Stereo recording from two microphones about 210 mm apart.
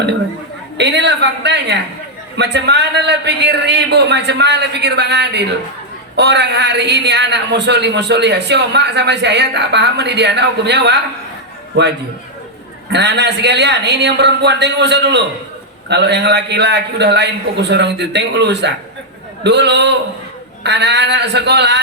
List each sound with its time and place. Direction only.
0.8 s a man's voice: 55° right (ahead or behind)
12.9 s a man's voice: 55° right (ahead or behind)